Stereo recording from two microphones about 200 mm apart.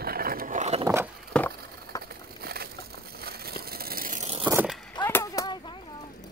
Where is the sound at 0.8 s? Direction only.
15° right (ahead or behind).